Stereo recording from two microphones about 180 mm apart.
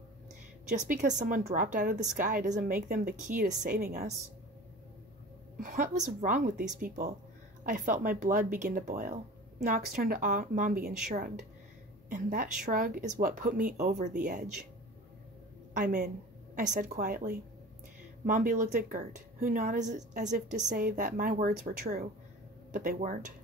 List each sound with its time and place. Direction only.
0.8 s speech: 45° right (ahead or behind)
5.6 s speech: 45° right (ahead or behind)
12.1 s speech: 45° right (ahead or behind)
15.7 s speech: 45° right (ahead or behind)